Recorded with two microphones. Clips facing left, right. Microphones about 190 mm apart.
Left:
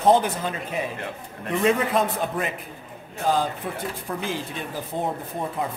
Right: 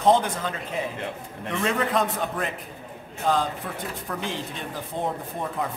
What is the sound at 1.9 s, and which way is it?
Speech, 5° left (ahead or behind).